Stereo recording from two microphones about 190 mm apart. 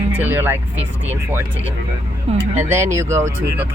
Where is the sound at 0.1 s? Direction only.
10° right (ahead or behind).